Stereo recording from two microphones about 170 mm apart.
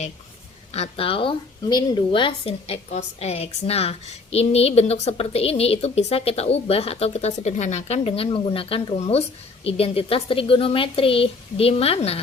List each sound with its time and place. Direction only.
0.7 s a woman's voice: 35° left (ahead or behind)